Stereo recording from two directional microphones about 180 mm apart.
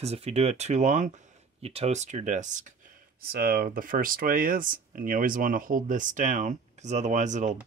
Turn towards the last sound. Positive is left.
turn(degrees=-40)  # may be behind; listen again after turning